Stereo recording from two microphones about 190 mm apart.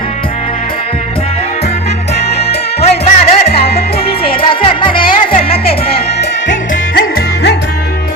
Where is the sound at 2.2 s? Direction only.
60° left (ahead or behind).